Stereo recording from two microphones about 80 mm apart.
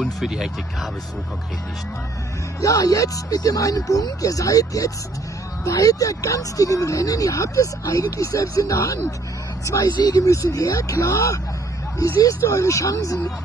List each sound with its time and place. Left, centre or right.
0.0 s speech: centre
2.6 s speech: left
10.0 s speech: left